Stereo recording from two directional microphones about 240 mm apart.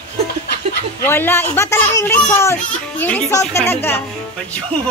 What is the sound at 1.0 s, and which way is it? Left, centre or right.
A child's voice, centre.